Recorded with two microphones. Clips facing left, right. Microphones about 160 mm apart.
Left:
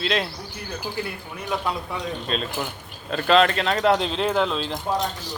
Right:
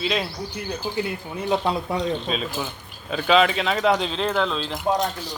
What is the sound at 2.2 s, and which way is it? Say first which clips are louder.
A man's voice: even; 5° right (ahead or behind).